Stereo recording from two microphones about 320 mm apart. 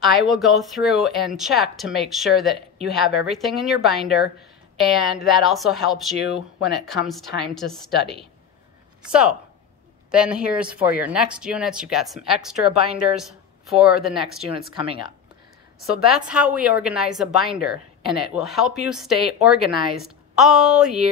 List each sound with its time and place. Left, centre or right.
0.2 s speech: centre
6.1 s speech: left
7.1 s speech: centre
14.7 s speech: centre
15.8 s a woman's voice: centre